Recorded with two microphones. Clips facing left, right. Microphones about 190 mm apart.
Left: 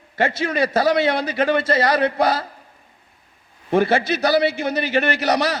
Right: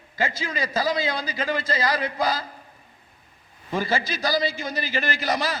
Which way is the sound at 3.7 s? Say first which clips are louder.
Left 8 dB; 65° left (ahead or behind).